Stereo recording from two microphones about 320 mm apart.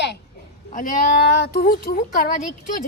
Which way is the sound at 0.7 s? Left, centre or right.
Left.